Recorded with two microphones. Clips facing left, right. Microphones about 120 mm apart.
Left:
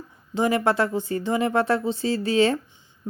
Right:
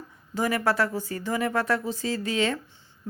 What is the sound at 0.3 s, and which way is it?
Speech, 25° left (ahead or behind).